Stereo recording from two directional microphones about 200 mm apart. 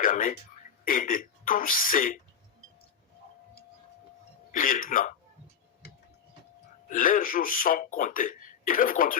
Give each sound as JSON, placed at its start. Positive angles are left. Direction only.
{"t": 0.0, "sound": "speech", "side_deg": 40}
{"t": 4.5, "sound": "speech", "side_deg": 40}
{"t": 6.9, "sound": "speech", "side_deg": 45}